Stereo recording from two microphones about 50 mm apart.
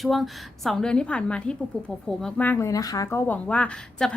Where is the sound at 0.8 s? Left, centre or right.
Centre.